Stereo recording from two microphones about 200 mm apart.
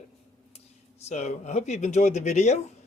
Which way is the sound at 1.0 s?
35° left (ahead or behind).